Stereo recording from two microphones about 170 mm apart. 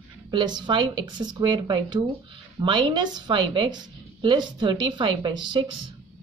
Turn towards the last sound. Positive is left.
turn(degrees=-25)  # may be behind; listen again after turning